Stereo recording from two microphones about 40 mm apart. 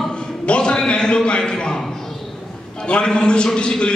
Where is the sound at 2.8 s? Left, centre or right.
Left.